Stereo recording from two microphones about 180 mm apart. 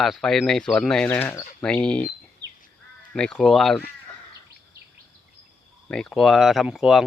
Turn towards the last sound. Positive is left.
turn(degrees=0)  # may be behind; listen again after turning